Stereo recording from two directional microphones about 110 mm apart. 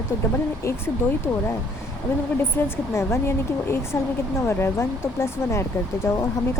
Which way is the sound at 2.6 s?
25° left (ahead or behind).